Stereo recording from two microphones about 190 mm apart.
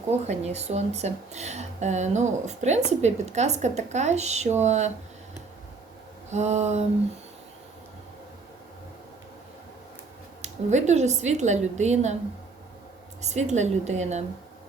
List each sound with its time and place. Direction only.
0.1 s speech: 35° right (ahead or behind)
6.3 s speech: 35° right (ahead or behind)
10.4 s speech: 35° right (ahead or behind)
13.2 s speech: 35° right (ahead or behind)